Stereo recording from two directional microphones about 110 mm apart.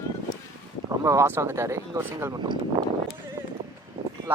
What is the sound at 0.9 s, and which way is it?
Speech, 25° right (ahead or behind).